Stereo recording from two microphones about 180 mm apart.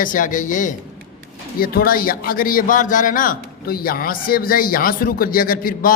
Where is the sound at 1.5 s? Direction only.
55° left (ahead or behind).